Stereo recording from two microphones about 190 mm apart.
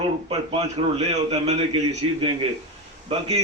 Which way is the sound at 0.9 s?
35° right (ahead or behind).